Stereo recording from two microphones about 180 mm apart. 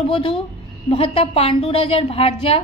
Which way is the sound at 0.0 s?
30° left (ahead or behind).